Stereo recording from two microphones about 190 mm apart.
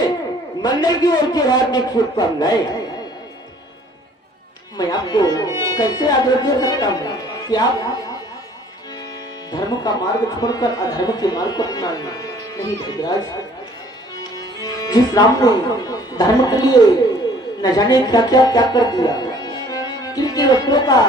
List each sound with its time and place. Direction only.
0.6 s speech: 20° left (ahead or behind)
4.8 s speech: 20° left (ahead or behind)
9.5 s speech: 20° left (ahead or behind)
14.2 s speech: 20° left (ahead or behind)